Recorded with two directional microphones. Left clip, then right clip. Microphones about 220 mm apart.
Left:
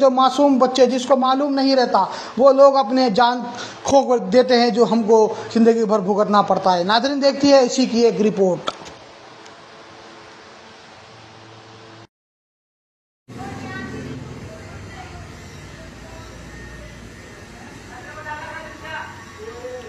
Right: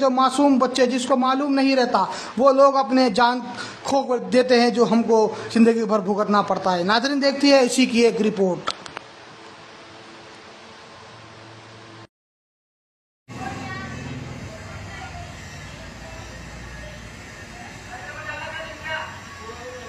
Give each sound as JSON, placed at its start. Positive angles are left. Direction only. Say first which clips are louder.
{"t": 0.0, "sound": "a man's voice", "louder": "left 4 dB", "side_deg": 5}